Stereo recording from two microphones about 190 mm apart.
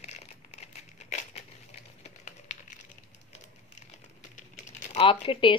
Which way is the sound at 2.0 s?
40° left (ahead or behind).